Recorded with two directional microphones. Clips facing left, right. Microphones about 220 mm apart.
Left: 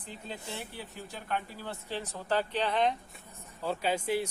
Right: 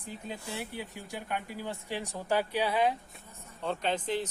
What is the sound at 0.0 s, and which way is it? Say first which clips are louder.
Speech: right 2 dB; 10° right (ahead or behind).